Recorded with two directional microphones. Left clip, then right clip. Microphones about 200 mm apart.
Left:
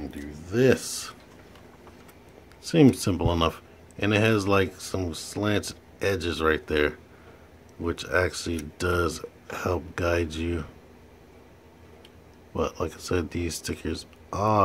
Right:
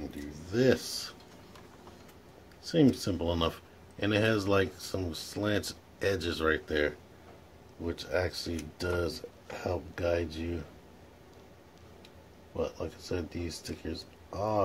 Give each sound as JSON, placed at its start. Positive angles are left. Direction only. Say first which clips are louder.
{"t": 0.5, "sound": "a sound", "louder": "left 5 dB", "side_deg": 15}
{"t": 2.7, "sound": "speech", "louder": "left 6 dB", "side_deg": 25}
{"t": 12.5, "sound": "speech", "louder": "left 6 dB", "side_deg": 30}